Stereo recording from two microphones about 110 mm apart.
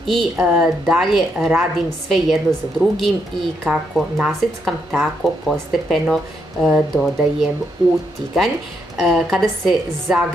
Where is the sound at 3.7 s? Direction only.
Centre (ahead or behind).